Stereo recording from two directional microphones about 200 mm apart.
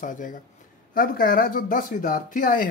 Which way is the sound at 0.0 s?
40° left (ahead or behind).